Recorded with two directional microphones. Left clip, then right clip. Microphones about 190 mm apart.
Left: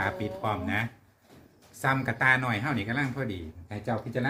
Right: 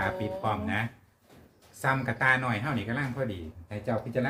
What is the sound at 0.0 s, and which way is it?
Speech, 25° left (ahead or behind).